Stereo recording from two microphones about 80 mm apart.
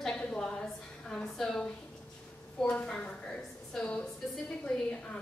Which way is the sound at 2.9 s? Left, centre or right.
Centre.